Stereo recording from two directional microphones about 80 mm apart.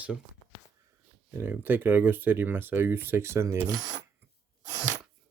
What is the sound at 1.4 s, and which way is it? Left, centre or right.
Speech, right.